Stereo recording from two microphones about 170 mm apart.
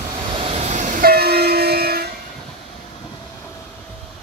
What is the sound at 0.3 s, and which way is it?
Train, 30° right (ahead or behind).